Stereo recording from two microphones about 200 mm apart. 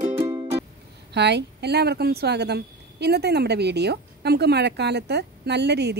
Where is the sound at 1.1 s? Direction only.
60° right (ahead or behind).